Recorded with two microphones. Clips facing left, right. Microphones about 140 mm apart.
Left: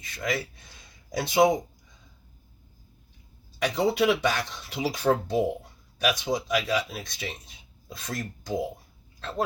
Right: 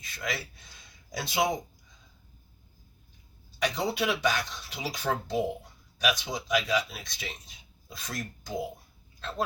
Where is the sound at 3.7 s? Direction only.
60° left (ahead or behind).